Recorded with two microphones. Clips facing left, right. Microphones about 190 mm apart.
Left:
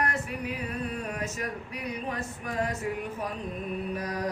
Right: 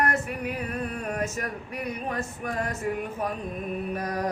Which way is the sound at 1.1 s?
50° right (ahead or behind).